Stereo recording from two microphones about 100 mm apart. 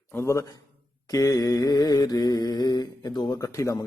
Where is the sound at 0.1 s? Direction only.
30° left (ahead or behind).